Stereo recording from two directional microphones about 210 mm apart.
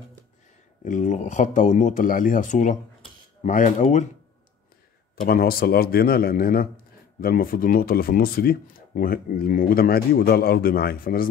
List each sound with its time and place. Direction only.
0.8 s speech: 35° left (ahead or behind)
5.2 s speech: 45° left (ahead or behind)